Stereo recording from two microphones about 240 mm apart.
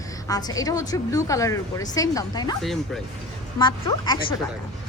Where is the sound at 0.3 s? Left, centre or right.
Centre.